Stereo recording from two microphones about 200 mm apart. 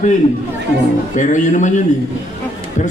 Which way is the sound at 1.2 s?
40° left (ahead or behind).